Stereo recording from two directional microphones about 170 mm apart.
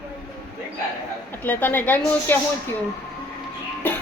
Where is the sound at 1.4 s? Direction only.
10° left (ahead or behind).